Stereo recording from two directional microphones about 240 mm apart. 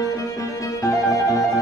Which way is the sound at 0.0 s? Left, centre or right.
Centre.